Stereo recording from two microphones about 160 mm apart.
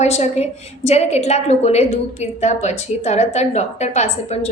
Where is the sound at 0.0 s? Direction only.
45° left (ahead or behind).